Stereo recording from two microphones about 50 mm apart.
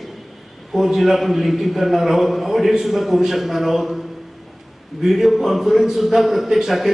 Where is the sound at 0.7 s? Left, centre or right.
Centre.